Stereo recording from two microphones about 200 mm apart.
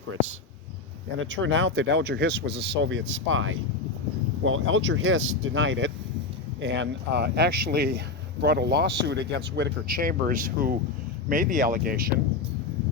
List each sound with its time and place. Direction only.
1.2 s speech: 70° right (ahead or behind); by 12.1 s 45° right (ahead or behind)